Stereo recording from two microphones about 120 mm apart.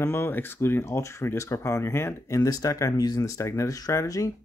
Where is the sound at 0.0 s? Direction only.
20° left (ahead or behind).